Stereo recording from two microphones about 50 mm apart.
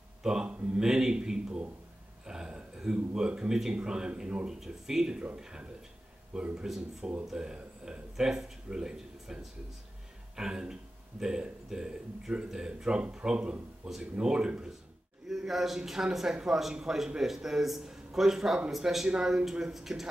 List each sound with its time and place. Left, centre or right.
0.2 s a man's voice: centre
15.2 s speech: centre